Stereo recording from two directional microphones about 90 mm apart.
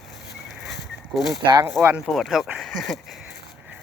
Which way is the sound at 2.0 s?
Centre (ahead or behind).